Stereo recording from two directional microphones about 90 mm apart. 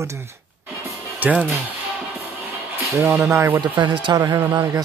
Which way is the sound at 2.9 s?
30° right (ahead or behind).